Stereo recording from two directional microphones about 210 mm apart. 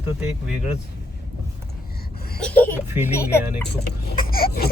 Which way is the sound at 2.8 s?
10° right (ahead or behind).